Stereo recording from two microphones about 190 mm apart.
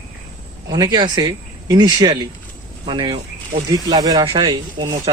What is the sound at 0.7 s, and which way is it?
A man's voice, 20° right (ahead or behind).